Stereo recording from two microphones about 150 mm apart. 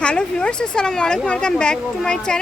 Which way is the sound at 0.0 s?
5° left (ahead or behind).